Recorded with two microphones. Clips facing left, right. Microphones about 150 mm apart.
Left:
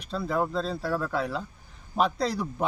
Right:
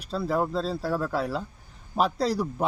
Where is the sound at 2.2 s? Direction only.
35° right (ahead or behind).